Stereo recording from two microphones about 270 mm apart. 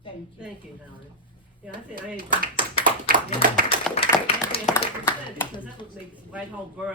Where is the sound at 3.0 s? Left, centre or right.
Right.